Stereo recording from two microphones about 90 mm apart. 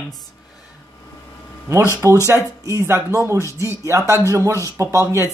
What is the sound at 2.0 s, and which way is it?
Speech, 35° right (ahead or behind).